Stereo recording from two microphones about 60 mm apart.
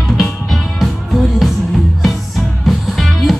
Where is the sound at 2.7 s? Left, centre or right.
Centre.